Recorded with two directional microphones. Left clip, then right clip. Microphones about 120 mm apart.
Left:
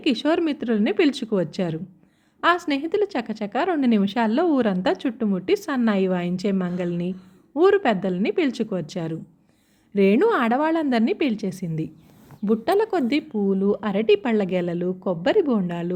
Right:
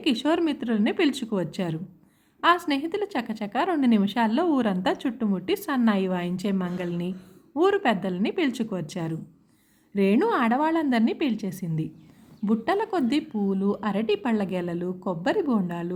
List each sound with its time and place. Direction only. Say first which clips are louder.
0.0 s a woman's voice: left 2 dB; 35° left (ahead or behind)